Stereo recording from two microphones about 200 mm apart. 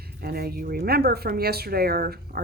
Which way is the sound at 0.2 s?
50° right (ahead or behind).